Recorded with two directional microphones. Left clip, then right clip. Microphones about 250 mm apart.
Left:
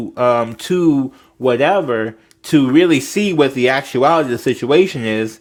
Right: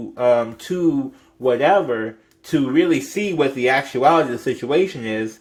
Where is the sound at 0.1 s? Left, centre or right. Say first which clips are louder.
Left 2 dB; left.